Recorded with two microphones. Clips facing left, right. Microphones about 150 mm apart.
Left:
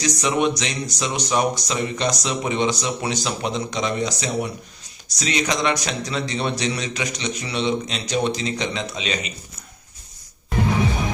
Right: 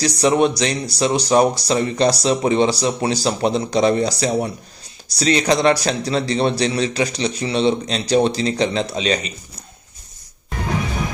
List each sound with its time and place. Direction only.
0.0 s speech: 35° right (ahead or behind)